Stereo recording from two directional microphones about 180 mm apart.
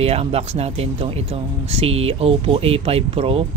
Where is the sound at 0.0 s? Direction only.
35° right (ahead or behind).